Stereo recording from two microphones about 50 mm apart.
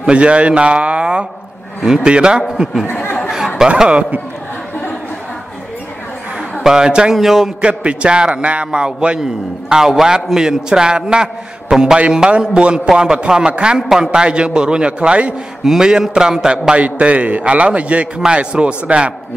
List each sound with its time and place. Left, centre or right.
0.0 s a man's voice: right
2.9 s chatter: left
3.3 s chatter: centre
6.6 s a man's voice: centre
7.6 s a man's voice: right
15.6 s a man's voice: centre
16.7 s a man's voice: right